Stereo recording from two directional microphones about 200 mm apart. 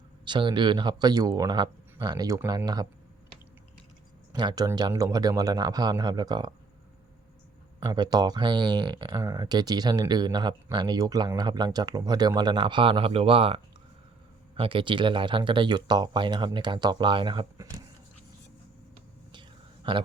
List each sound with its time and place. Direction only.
0.3 s speech: 25° right (ahead or behind)
4.3 s speech: 20° right (ahead or behind)
7.9 s speech: 20° right (ahead or behind)
19.3 s whispering: 25° right (ahead or behind)